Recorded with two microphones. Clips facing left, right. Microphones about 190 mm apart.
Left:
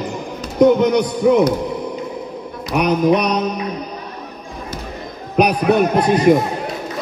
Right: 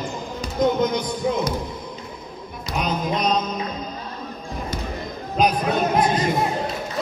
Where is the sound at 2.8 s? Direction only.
70° left (ahead or behind).